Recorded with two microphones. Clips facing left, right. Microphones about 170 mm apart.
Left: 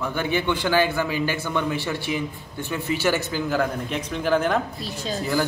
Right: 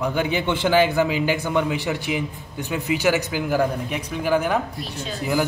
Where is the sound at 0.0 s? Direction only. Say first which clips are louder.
Right 2 dB; 15° right (ahead or behind).